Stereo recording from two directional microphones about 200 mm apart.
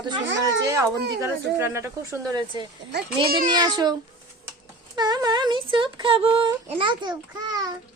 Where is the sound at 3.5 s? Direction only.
20° right (ahead or behind).